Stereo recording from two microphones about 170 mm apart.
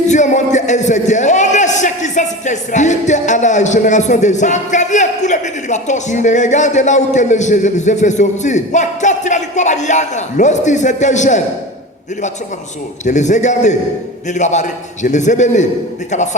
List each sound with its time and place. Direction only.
0.1 s a man's voice: 45° left (ahead or behind)
13.1 s a man's voice: 45° left (ahead or behind)